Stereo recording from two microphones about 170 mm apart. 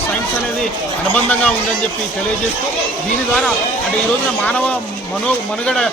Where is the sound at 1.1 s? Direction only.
10° left (ahead or behind).